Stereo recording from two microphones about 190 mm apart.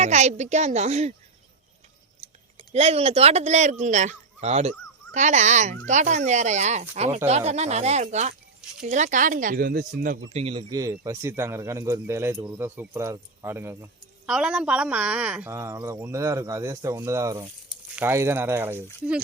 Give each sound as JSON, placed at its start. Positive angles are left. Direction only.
{"t": 0.0, "sound": "speech", "side_deg": -35}
{"t": 2.6, "sound": "speech", "side_deg": -35}
{"t": 10.3, "sound": "speech", "side_deg": -30}